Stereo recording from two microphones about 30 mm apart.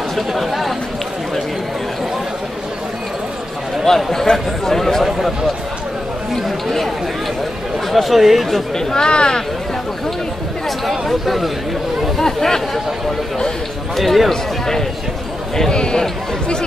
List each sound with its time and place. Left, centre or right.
0.1 s speech: centre
3.8 s a man's voice: centre
5.0 s speech: centre
7.9 s speech: centre
8.7 s speech: left
10.9 s speech: centre
12.2 s a man's voice: centre
13.9 s speech: centre
14.3 s a man's voice: centre
15.7 s a man's voice: left